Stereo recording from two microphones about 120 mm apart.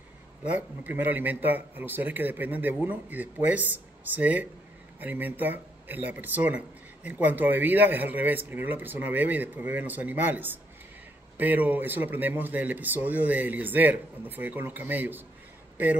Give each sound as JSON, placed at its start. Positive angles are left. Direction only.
{"t": 0.4, "sound": "speech", "side_deg": -10}